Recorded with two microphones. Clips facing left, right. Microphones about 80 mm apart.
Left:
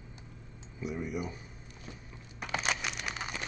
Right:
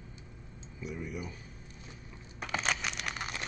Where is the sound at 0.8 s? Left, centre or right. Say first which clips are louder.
Left 4 dB; centre.